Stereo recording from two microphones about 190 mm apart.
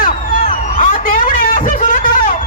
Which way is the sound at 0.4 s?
40° left (ahead or behind).